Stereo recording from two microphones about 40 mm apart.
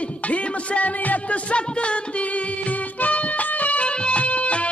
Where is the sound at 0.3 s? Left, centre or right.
Left.